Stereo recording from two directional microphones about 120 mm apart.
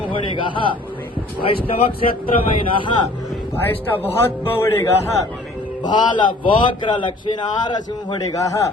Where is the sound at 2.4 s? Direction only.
45° left (ahead or behind).